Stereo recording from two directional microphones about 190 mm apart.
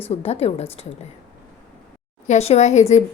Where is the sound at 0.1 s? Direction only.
35° left (ahead or behind).